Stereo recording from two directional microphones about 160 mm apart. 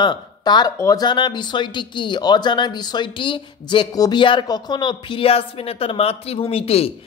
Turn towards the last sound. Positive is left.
turn(degrees=40)  # may be behind; listen again after turning